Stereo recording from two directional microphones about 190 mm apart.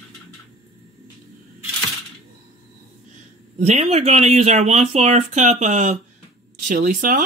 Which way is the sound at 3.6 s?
35° right (ahead or behind).